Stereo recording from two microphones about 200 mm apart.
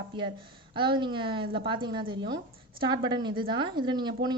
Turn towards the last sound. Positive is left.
turn(degrees=-20)  # may be behind; listen again after turning